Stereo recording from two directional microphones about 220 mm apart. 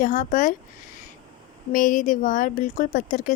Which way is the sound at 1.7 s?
35° left (ahead or behind).